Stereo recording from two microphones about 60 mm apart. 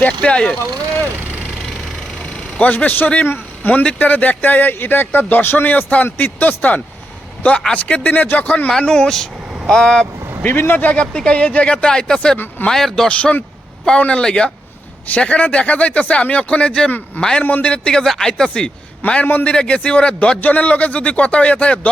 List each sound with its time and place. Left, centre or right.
0.0 s a man's voice: centre
2.6 s speech: left
8.1 s speech: left
8.8 s a man's voice: centre
10.4 s speech: left
11.0 s a man's voice: centre
13.1 s a man's voice: centre
20.4 s speech: left